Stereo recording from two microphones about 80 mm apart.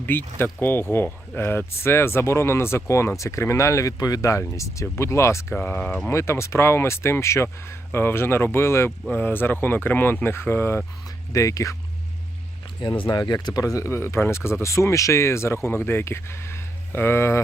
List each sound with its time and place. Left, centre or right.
0.0 s speech: left
5.5 s speech: centre
6.1 s speech: left
11.3 s speech: left
12.8 s speech: left